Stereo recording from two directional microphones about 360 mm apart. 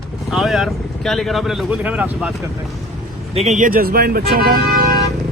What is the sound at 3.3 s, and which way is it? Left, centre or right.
Speech, centre.